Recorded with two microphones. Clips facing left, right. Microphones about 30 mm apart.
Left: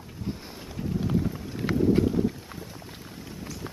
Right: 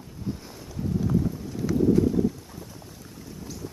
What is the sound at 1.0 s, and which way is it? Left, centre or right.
Clip-clop, left.